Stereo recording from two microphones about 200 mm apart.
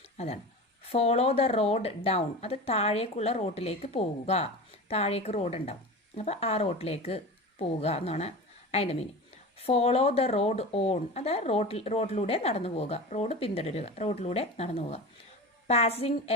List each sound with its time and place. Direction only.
0.2 s speech: 30° left (ahead or behind)